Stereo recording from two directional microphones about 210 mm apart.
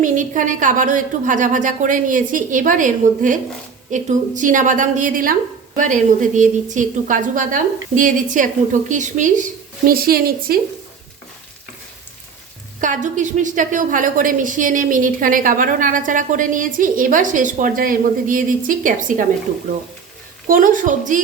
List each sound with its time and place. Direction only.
0.0 s a woman's voice: 40° right (ahead or behind)
12.8 s a woman's voice: 35° right (ahead or behind)
20.5 s a woman's voice: 40° right (ahead or behind)